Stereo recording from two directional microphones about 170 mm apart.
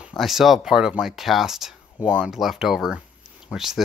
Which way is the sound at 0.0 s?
Centre (ahead or behind).